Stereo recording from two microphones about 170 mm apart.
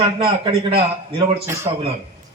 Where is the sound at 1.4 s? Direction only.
15° right (ahead or behind).